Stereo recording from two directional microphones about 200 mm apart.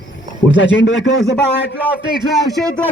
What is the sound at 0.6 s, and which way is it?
Speech, 65° left (ahead or behind).